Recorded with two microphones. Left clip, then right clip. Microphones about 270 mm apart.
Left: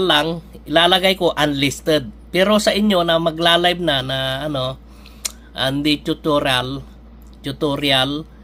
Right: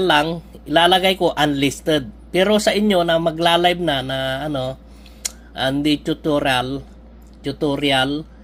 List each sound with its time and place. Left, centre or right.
0.0 s speech: centre